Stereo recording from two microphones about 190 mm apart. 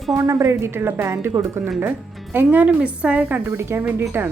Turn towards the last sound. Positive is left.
turn(degrees=-10)  # may be behind; listen again after turning